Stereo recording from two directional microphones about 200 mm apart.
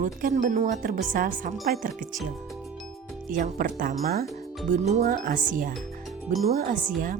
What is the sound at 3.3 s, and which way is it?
Speech, 45° right (ahead or behind).